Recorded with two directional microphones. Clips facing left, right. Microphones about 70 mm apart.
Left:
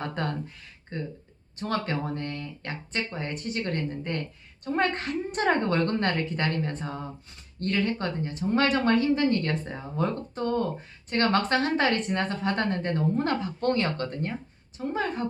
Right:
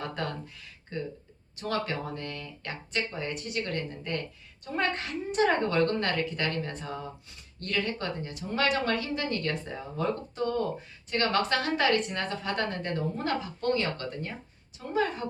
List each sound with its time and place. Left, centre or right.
0.2 s a woman's voice: left
14.8 s a woman's voice: left